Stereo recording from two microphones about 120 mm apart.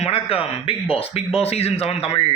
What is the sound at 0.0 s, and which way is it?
A man's voice, 55° left (ahead or behind).